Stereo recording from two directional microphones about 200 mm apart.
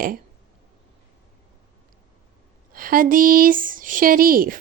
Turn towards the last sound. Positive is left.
turn(degrees=-45)  # may be behind; listen again after turning